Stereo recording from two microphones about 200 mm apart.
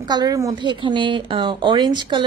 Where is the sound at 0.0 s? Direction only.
20° right (ahead or behind).